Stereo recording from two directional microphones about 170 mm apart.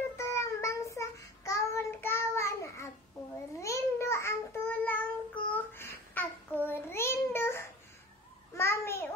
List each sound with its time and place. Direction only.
0.2 s child singing: 15° left (ahead or behind)
8.5 s babbling: 15° left (ahead or behind)